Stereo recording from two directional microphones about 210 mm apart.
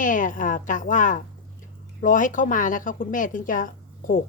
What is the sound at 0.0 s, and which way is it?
A woman's voice, 40° left (ahead or behind).